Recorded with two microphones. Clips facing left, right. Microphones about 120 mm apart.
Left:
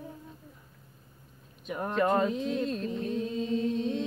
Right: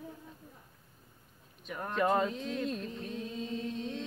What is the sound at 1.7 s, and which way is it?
Speech, 15° left (ahead or behind).